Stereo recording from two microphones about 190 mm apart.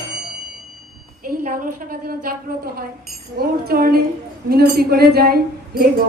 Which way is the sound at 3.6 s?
50° right (ahead or behind).